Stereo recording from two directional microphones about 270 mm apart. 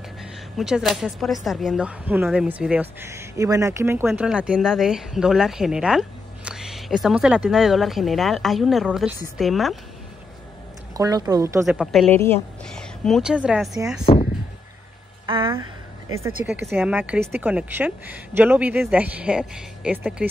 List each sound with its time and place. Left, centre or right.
0.6 s speech: centre
11.0 s speech: centre
11.6 s a woman's voice: centre
15.2 s speech: centre
16.4 s speech: centre